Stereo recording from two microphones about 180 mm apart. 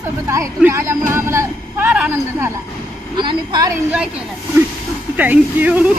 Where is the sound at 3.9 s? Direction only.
5° right (ahead or behind).